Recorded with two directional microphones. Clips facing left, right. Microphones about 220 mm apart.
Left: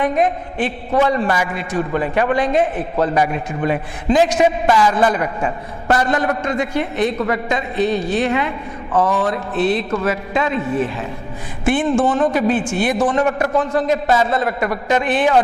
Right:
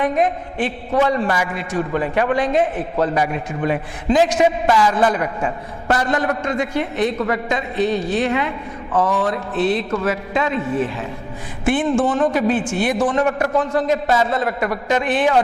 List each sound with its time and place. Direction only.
0.0 s a man's voice: 20° left (ahead or behind)
11.9 s a man's voice: 25° left (ahead or behind)